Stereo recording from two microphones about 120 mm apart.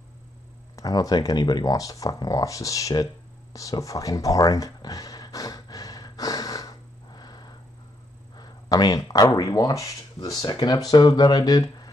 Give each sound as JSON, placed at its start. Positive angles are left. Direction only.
{"t": 0.7, "sound": "speech", "side_deg": 30}
{"t": 3.5, "sound": "a sound", "side_deg": 30}
{"t": 8.4, "sound": "speech", "side_deg": 35}